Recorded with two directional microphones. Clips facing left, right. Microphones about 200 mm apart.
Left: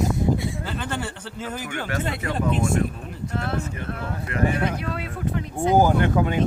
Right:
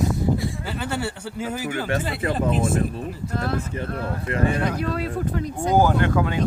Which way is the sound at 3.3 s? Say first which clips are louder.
Right 1 dB; 35° right (ahead or behind).